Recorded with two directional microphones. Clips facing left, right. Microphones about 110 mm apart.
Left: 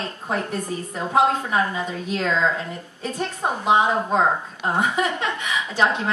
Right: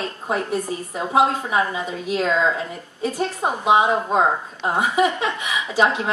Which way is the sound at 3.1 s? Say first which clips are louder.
Even; 10° right (ahead or behind).